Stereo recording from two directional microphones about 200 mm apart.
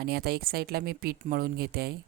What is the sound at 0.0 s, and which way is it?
A woman's voice, 50° right (ahead or behind).